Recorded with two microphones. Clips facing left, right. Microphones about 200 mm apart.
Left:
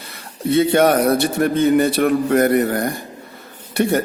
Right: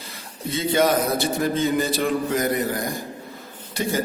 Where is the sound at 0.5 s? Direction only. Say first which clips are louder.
Left 6 dB; 65° left (ahead or behind).